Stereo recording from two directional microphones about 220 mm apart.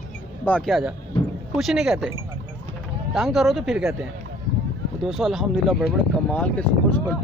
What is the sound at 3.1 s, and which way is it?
Speech, centre (ahead or behind).